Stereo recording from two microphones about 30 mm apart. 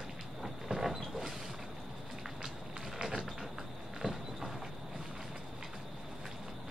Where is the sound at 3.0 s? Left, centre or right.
Right.